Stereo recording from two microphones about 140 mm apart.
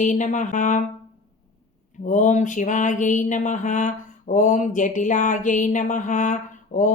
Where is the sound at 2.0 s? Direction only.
65° left (ahead or behind).